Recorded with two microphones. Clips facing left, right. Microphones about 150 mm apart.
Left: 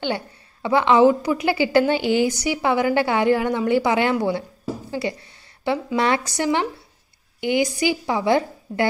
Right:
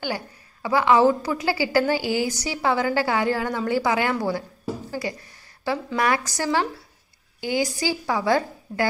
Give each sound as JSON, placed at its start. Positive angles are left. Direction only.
{"t": 0.0, "sound": "a woman's voice", "side_deg": 25}
{"t": 5.9, "sound": "a woman's voice", "side_deg": 25}